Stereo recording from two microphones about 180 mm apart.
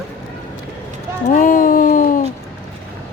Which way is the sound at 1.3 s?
50° left (ahead or behind).